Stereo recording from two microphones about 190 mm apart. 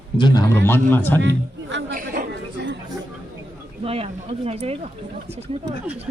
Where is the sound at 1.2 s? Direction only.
70° right (ahead or behind).